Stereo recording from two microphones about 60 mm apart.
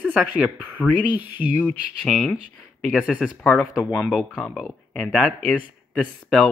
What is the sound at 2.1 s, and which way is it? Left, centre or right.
Speech, centre.